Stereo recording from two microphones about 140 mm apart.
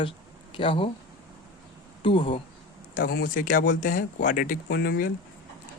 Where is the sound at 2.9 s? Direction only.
90° left.